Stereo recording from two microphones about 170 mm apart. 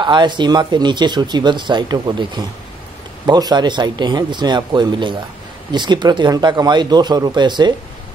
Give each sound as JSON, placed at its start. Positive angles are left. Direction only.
{"t": 0.0, "sound": "speech", "side_deg": -25}